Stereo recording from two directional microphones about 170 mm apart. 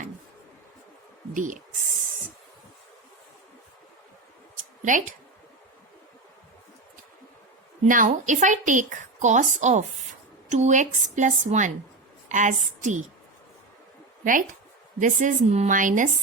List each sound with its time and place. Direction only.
1.3 s a woman's voice: 50° right (ahead or behind)
4.8 s speech: 50° right (ahead or behind)
7.9 s a woman's voice: 50° right (ahead or behind)
14.9 s a woman's voice: 50° right (ahead or behind)